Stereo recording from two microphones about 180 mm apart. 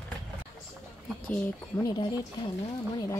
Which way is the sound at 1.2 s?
10° left (ahead or behind).